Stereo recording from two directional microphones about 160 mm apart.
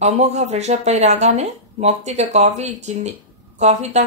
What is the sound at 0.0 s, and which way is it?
Speech, 45° right (ahead or behind).